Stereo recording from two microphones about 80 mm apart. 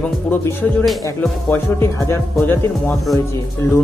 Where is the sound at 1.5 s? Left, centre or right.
Left.